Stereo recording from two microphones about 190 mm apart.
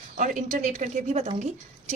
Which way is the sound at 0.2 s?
40° right (ahead or behind).